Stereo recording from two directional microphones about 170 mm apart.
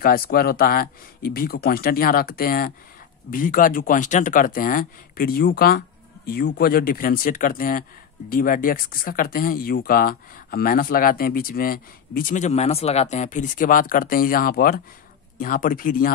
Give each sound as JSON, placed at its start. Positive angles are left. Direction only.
{"t": 0.0, "sound": "speech", "side_deg": 60}